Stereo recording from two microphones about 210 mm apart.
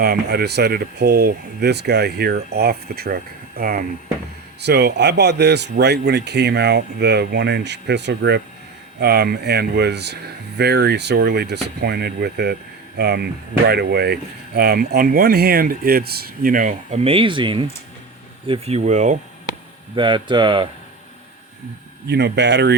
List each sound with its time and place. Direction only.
0.0 s speech: 50° right (ahead or behind)
4.6 s speech: 50° right (ahead or behind); by 19.1 s 35° right (ahead or behind)
20.0 s speech: 25° right (ahead or behind)
22.0 s speech: 55° right (ahead or behind)